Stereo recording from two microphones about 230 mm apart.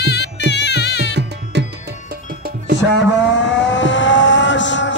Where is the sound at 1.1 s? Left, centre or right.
Right.